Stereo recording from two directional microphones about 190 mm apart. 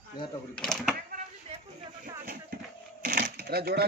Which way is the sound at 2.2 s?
55° right (ahead or behind).